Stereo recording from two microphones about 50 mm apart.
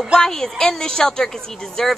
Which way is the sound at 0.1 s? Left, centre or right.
Centre.